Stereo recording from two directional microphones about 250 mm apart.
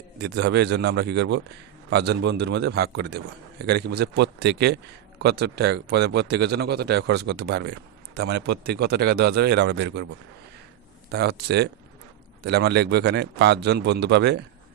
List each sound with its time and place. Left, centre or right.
0.2 s a man's voice: right
11.1 s speech: right